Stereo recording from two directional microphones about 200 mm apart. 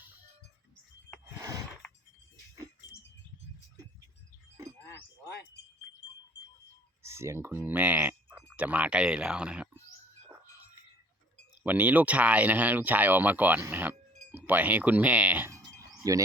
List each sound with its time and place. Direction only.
1.4 s a sound: 15° right (ahead or behind)
7.0 s speech: 15° right (ahead or behind)
11.6 s speech: 10° right (ahead or behind)